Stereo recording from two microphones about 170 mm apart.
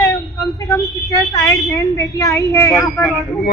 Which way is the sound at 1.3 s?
20° left (ahead or behind).